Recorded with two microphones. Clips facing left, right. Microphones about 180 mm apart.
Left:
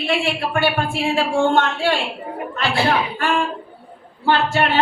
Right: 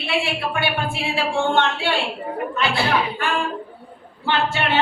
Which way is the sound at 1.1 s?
40° left (ahead or behind).